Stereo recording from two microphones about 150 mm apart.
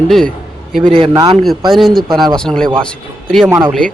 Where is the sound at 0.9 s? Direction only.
35° right (ahead or behind).